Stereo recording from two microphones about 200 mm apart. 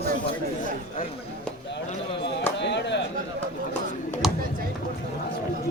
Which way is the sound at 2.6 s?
60° left (ahead or behind).